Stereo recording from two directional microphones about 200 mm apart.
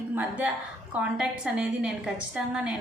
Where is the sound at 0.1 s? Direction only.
5° right (ahead or behind).